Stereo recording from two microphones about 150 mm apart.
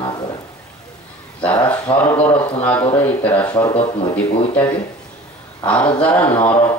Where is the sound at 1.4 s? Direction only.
10° left (ahead or behind).